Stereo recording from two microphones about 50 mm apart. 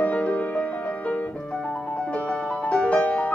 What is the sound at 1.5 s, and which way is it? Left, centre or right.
Music, centre.